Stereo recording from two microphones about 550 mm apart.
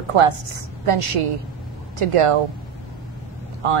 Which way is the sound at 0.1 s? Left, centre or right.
Right.